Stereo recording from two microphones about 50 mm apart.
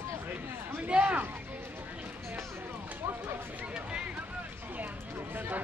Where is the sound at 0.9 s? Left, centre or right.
Right.